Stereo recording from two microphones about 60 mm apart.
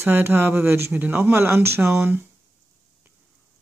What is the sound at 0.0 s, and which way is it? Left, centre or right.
A man's voice, right.